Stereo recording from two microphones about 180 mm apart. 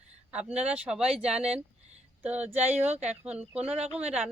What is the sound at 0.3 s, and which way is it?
Speech, 5° right (ahead or behind).